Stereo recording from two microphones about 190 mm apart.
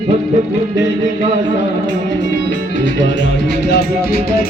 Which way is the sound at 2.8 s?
70° left (ahead or behind).